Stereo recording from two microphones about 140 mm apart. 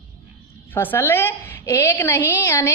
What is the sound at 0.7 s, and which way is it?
A woman's voice, 15° left (ahead or behind).